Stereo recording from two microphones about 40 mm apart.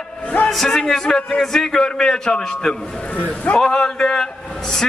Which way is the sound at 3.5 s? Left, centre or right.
Centre.